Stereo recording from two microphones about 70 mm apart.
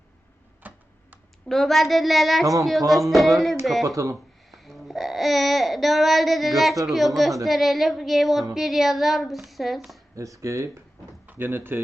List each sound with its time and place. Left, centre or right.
0.6 s computer keyboard: right
1.5 s speech: centre
3.8 s speech: right
4.5 s speech: centre
10.2 s speech: right
11.3 s speech: right